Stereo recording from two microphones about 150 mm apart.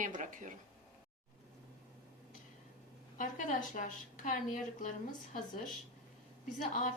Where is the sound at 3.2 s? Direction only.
60° left (ahead or behind).